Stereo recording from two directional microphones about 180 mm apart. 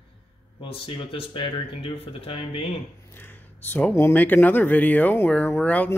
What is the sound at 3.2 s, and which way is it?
Speech, 10° left (ahead or behind).